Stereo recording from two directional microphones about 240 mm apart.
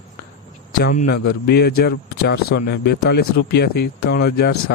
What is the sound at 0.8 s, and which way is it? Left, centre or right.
A man's voice, left.